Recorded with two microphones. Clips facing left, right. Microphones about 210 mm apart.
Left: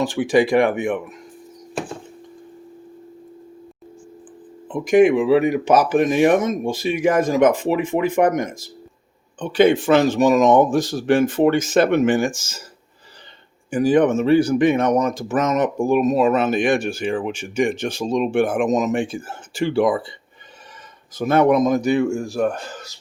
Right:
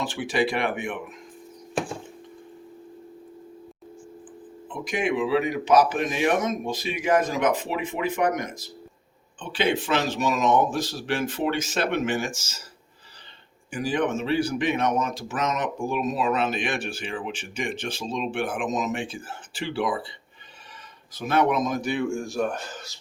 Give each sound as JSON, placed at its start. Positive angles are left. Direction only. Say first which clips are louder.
{"t": 0.0, "sound": "speech", "louder": "left 8 dB", "side_deg": 45}
{"t": 4.7, "sound": "speech", "louder": "left 12 dB", "side_deg": 50}
{"t": 13.7, "sound": "speech", "louder": "left 10 dB", "side_deg": 45}
{"t": 21.2, "sound": "speech", "louder": "left 7 dB", "side_deg": 50}